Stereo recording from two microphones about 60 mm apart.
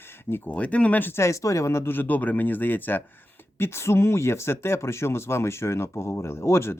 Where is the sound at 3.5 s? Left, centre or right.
Left.